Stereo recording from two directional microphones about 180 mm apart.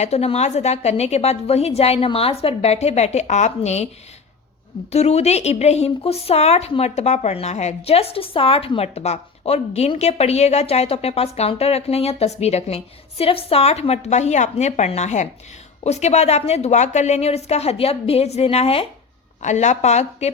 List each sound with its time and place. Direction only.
0.0 s speech: 35° left (ahead or behind)
4.9 s speech: 35° left (ahead or behind)